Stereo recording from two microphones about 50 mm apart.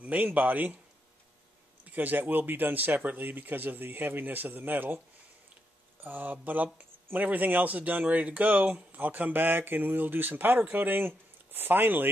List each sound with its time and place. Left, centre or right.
0.0 s speech: right
1.9 s speech: right
6.0 s speech: right